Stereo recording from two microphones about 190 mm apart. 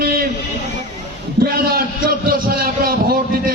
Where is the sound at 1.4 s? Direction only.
55° right (ahead or behind).